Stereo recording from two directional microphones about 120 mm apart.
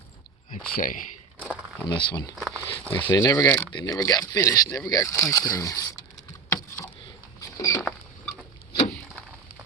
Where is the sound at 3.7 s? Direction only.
30° left (ahead or behind).